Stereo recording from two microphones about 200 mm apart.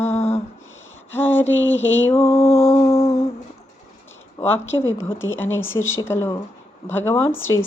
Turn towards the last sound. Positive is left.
turn(degrees=10)  # may be behind; listen again after turning